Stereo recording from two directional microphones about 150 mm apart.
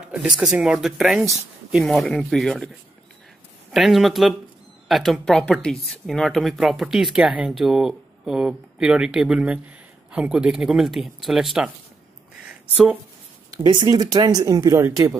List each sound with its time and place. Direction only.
0.1 s speech: 5° right (ahead or behind)
3.7 s speech: centre (ahead or behind)
13.5 s speech: 30° right (ahead or behind)